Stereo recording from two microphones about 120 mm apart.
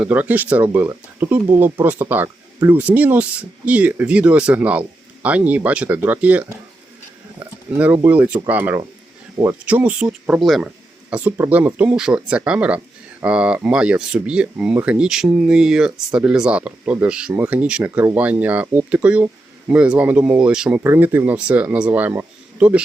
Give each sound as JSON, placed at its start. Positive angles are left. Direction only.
{"t": 0.0, "sound": "speech", "side_deg": -15}
{"t": 7.3, "sound": "a sound", "side_deg": -15}
{"t": 8.0, "sound": "speech", "side_deg": -15}
{"t": 11.1, "sound": "speech", "side_deg": -15}
{"t": 20.8, "sound": "speech", "side_deg": -20}